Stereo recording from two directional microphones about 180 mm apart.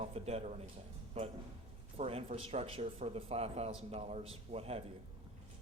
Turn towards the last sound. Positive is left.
turn(degrees=-35)  # may be behind; listen again after turning